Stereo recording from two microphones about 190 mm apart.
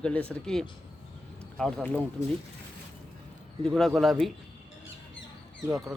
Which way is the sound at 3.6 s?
Centre (ahead or behind).